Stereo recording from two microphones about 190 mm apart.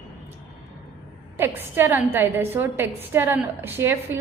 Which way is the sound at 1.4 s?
10° right (ahead or behind).